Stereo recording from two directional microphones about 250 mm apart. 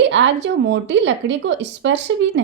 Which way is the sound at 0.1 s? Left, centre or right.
Right.